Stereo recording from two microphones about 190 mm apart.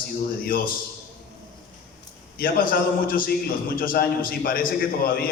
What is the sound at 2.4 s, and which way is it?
A man's voice, 50° left (ahead or behind).